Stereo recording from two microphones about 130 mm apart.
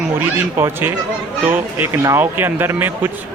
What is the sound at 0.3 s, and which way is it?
A man's voice, 15° right (ahead or behind).